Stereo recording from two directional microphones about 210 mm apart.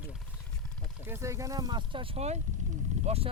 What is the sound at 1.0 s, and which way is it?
Speech, 10° right (ahead or behind).